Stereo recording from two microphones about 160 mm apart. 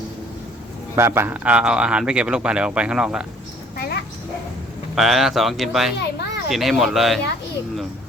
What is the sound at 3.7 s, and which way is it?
Dog, 70° left (ahead or behind).